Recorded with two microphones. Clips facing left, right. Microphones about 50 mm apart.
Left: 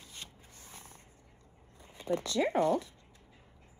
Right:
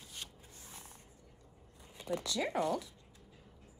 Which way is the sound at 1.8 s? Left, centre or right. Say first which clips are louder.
Left 5 dB; left.